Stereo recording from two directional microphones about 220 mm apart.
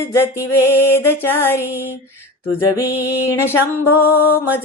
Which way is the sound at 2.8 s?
10° left (ahead or behind).